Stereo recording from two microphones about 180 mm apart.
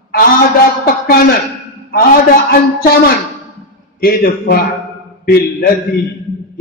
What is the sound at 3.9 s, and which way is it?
Speech, 55° left (ahead or behind).